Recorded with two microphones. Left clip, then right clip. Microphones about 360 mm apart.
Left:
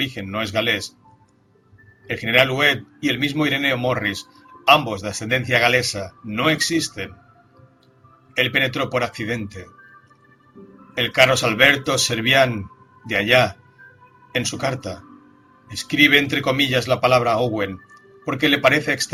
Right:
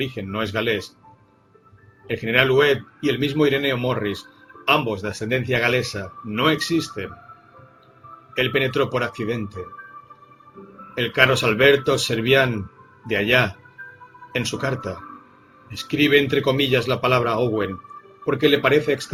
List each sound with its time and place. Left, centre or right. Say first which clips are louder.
0.0 s a man's voice: left 1 dB; centre
2.0 s a man's voice: left 1 dB; centre
8.4 s a man's voice: left 1 dB; centre
10.9 s a man's voice: left 2 dB; centre
18.3 s a man's voice: left 1 dB; centre